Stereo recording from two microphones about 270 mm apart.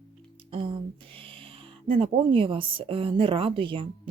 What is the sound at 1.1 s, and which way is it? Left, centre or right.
Speech, centre.